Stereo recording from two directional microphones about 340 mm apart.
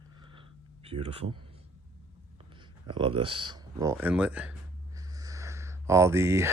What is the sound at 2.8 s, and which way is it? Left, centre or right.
Speech, centre.